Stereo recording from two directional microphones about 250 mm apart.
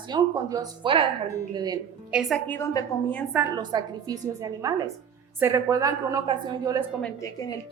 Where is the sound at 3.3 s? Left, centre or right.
Centre.